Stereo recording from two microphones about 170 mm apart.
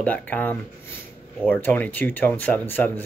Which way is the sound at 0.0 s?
10° left (ahead or behind).